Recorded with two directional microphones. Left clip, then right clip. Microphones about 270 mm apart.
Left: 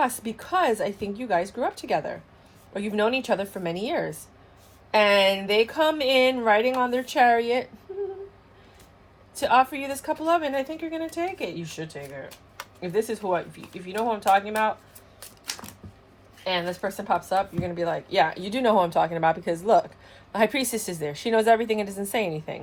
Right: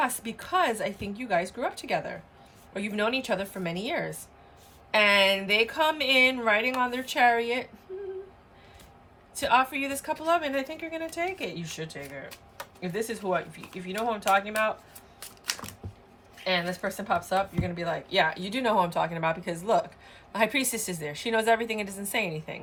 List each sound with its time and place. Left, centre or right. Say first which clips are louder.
0.0 s speech: left 3 dB; centre
9.3 s speech: left 3 dB; centre
15.2 s a sound: right 2 dB; centre
16.4 s speech: left 1 dB; centre